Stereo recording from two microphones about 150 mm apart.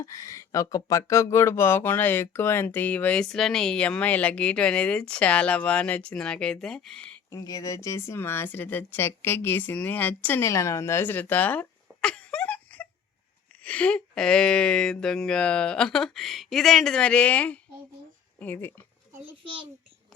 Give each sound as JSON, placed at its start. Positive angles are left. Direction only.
{"t": 0.0, "sound": "speech", "side_deg": 20}
{"t": 7.3, "sound": "speech", "side_deg": 25}
{"t": 19.2, "sound": "a child's voice", "side_deg": -35}